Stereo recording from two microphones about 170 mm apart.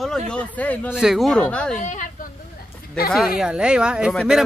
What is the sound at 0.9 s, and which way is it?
Speech, 5° right (ahead or behind).